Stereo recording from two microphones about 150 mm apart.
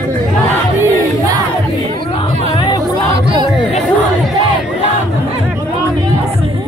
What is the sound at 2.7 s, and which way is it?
Music, 25° left (ahead or behind).